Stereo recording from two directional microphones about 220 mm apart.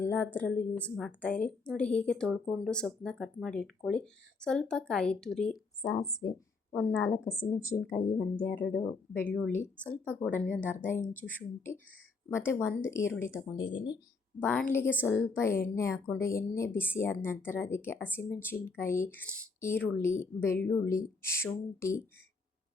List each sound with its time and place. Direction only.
0.0 s a woman's voice: 10° left (ahead or behind)
6.7 s speech: 10° left (ahead or behind)
10.0 s speech: 10° right (ahead or behind)
10.3 s speech: 5° left (ahead or behind)
14.4 s speech: 10° left (ahead or behind)